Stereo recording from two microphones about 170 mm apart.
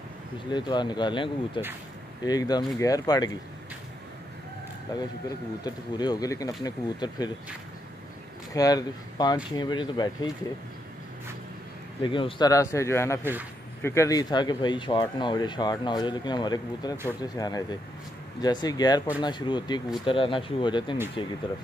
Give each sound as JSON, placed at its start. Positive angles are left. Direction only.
{"t": 0.5, "sound": "speech", "side_deg": 25}
{"t": 4.9, "sound": "speech", "side_deg": 25}
{"t": 8.5, "sound": "speech", "side_deg": 20}
{"t": 12.0, "sound": "speech", "side_deg": 30}
{"t": 13.2, "sound": "a man's voice", "side_deg": -10}
{"t": 13.8, "sound": "speech", "side_deg": 20}